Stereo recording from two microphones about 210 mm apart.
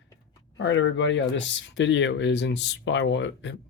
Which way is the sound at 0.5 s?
60° left (ahead or behind).